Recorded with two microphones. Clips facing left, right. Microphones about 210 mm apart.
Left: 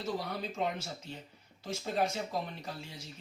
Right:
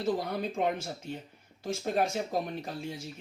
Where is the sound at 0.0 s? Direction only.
55° right (ahead or behind).